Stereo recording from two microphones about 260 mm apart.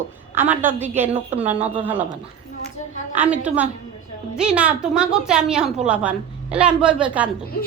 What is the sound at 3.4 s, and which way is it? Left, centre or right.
A woman's voice, centre.